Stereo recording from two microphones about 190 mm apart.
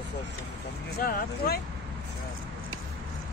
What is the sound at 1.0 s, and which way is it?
Speech, 50° left (ahead or behind).